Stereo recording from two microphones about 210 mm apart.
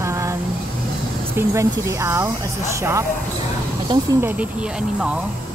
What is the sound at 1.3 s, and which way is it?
Speech, 15° right (ahead or behind).